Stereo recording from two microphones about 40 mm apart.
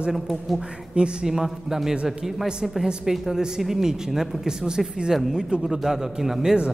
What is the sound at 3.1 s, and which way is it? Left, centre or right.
A man's voice, centre.